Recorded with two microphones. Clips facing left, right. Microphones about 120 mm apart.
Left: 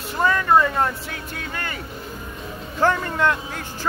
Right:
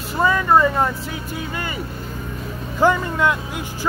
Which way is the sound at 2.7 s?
10° right (ahead or behind).